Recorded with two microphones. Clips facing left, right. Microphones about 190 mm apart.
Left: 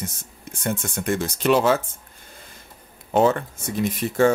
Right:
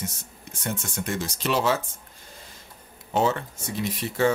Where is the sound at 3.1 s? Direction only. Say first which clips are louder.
Left 5 dB; 55° left (ahead or behind).